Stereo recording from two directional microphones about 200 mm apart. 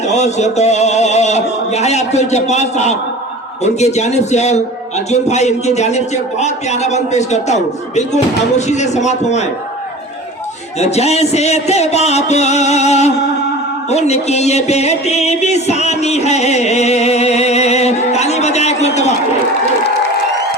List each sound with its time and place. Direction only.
0.0 s music: 35° left (ahead or behind)
10.8 s music: 35° left (ahead or behind)